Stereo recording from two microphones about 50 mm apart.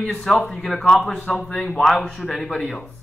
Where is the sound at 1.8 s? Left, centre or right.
Centre.